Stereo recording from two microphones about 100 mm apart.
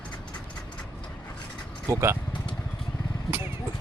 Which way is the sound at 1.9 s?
30° right (ahead or behind).